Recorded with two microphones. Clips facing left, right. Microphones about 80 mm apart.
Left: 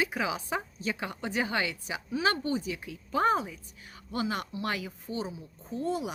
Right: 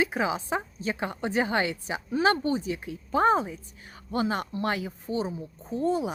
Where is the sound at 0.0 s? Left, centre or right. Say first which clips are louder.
Right 4 dB; right.